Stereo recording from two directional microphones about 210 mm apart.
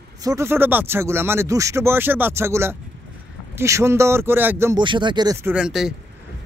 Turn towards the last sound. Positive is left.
turn(degrees=-5)  # may be behind; listen again after turning